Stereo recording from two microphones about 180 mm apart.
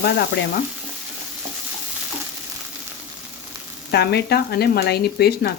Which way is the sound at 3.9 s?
65° left (ahead or behind).